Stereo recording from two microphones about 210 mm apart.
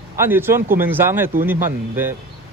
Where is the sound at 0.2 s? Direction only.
10° right (ahead or behind).